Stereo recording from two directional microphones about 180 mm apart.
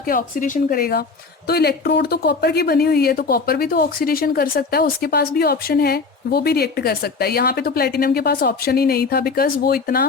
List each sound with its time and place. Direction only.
0.0 s a woman's voice: 50° left (ahead or behind)